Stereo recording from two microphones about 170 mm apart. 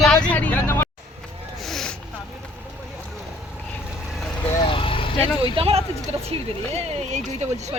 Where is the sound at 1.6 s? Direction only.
Centre (ahead or behind).